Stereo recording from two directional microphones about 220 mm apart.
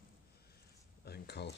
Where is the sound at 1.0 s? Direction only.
50° left (ahead or behind).